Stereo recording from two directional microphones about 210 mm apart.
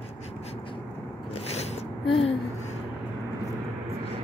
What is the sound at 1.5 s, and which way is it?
Gasp, 30° left (ahead or behind).